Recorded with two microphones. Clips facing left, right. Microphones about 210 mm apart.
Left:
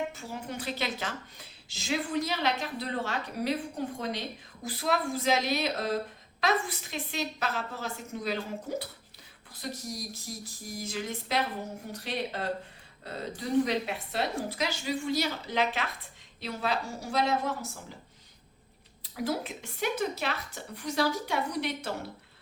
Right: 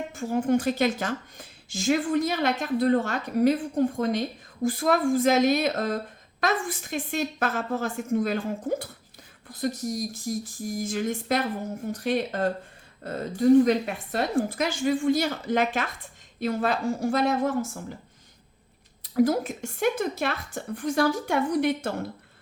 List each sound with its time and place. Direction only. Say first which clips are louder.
0.1 s a woman's voice: right 14 dB; 50° right (ahead or behind)
19.1 s a woman's voice: right 10 dB; 45° right (ahead or behind)